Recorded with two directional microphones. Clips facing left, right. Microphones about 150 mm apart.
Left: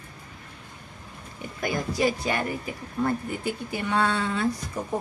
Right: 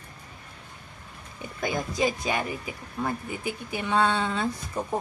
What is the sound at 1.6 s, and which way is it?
Speech, 20° right (ahead or behind).